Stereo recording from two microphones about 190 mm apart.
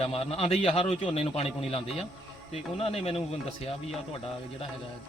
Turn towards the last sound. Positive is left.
turn(degrees=30)  # may be behind; listen again after turning